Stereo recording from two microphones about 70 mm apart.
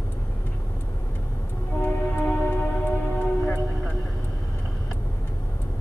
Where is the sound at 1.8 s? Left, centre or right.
Left.